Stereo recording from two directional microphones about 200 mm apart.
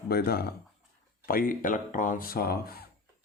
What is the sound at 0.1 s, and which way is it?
Speech, 50° left (ahead or behind).